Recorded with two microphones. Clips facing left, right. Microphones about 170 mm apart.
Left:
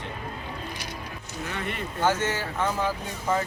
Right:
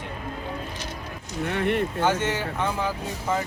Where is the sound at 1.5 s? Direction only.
65° right (ahead or behind).